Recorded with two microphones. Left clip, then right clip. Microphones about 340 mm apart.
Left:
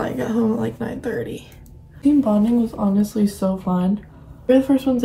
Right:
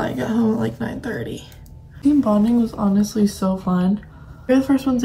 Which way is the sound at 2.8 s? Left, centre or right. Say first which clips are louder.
Even; right.